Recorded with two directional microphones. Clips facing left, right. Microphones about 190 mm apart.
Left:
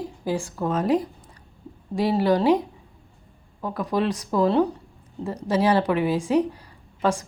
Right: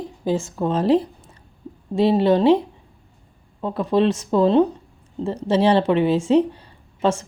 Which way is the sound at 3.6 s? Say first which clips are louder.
Right 6 dB; 25° right (ahead or behind).